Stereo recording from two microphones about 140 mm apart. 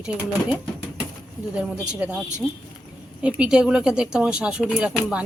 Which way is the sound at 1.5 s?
5° right (ahead or behind).